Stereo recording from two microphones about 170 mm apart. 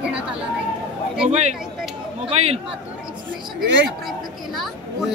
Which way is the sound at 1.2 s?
40° right (ahead or behind).